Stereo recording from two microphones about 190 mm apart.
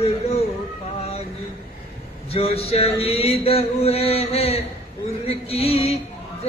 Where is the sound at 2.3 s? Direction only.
30° left (ahead or behind).